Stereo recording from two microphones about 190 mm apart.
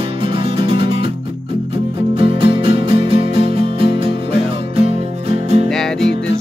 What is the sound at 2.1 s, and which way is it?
Music, 30° right (ahead or behind).